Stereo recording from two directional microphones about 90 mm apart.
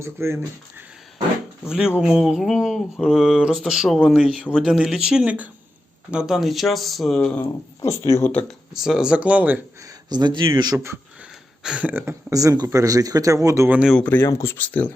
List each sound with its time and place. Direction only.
0.0 s speech: 30° right (ahead or behind)
1.7 s speech: 10° right (ahead or behind)
7.2 s speech: 10° left (ahead or behind)
7.8 s speech: 35° left (ahead or behind)
8.2 s speech: 15° left (ahead or behind)
8.4 s speech: 5° right (ahead or behind)
9.8 s speech: 50° right (ahead or behind)
11.6 s speech: 15° right (ahead or behind)
12.3 s speech: 40° right (ahead or behind)
14.0 s speech: 20° left (ahead or behind)
14.3 s speech: 40° left (ahead or behind)
14.5 s speech: 20° left (ahead or behind)